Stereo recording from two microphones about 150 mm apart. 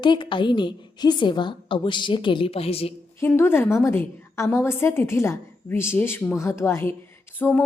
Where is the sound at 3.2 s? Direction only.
15° left (ahead or behind).